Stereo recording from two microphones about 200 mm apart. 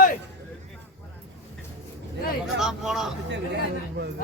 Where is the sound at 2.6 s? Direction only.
Centre (ahead or behind).